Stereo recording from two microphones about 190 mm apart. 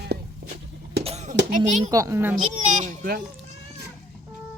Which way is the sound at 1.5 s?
40° right (ahead or behind).